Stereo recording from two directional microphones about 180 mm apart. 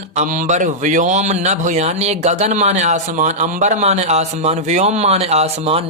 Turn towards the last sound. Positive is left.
turn(degrees=-35)  # may be behind; listen again after turning